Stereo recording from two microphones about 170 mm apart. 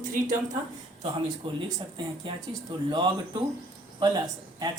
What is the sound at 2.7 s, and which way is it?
Speech, 25° right (ahead or behind).